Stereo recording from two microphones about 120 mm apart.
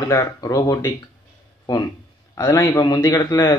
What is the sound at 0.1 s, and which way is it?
Speech, 25° left (ahead or behind).